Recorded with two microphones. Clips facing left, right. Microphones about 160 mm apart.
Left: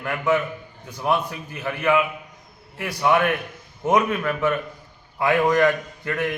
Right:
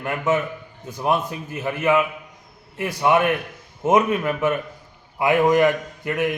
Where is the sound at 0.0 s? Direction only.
25° right (ahead or behind).